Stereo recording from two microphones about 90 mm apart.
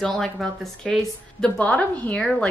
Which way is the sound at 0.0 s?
5° left (ahead or behind).